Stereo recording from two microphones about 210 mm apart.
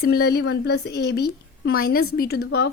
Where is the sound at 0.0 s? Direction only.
50° left (ahead or behind).